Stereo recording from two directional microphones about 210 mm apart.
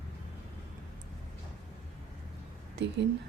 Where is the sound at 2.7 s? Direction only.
55° right (ahead or behind).